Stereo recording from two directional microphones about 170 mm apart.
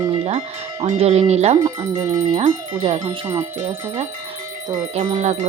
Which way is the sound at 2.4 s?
40° right (ahead or behind).